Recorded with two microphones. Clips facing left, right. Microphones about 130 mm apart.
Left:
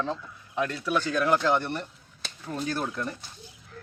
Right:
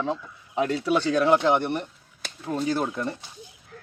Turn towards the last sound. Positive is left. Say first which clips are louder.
# right 4 dB
turn(degrees=-25)  # may be behind; listen again after turning